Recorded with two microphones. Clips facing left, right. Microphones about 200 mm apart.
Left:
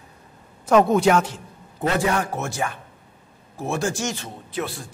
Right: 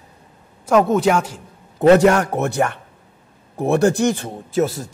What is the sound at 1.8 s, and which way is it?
A man's voice, 75° right (ahead or behind).